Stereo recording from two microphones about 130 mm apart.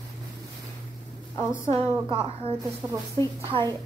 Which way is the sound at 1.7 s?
45° right (ahead or behind).